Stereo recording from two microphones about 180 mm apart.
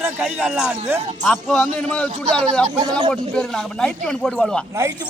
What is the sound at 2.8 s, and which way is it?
Speech, 20° right (ahead or behind).